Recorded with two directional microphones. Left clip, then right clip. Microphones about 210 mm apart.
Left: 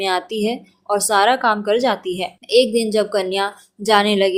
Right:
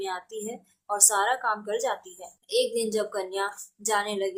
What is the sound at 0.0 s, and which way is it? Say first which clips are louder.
A woman's voice: left 13 dB; 30° left (ahead or behind).